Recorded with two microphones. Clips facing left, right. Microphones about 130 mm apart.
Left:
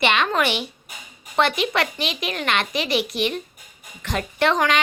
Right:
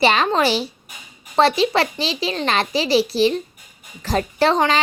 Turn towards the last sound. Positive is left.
turn(degrees=-30)  # may be behind; listen again after turning